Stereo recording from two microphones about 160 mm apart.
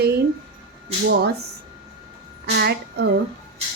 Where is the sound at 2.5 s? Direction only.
90° right.